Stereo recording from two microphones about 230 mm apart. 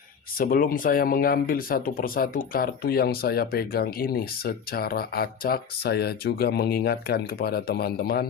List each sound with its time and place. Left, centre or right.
0.3 s speech: left